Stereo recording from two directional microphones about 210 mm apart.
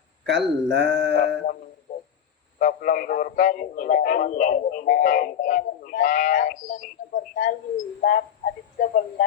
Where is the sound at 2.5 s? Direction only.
40° left (ahead or behind).